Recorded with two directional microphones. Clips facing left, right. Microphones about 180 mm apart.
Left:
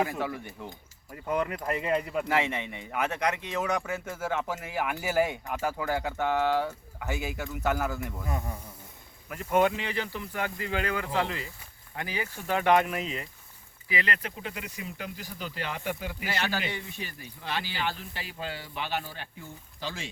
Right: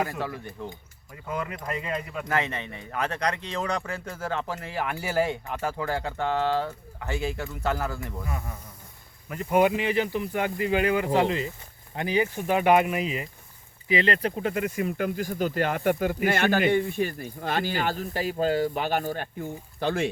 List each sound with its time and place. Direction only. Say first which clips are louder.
0.0 s speech: even; 5° left (ahead or behind)
1.8 s speech: left 4 dB; 35° left (ahead or behind)
2.2 s speech: even; 10° left (ahead or behind)
8.3 s speech: left 4 dB; 20° left (ahead or behind)
9.3 s speech: right 3 dB; 5° right (ahead or behind)
13.8 s speech: right 8 dB; 25° right (ahead or behind); by 20.1 s 55° right (ahead or behind)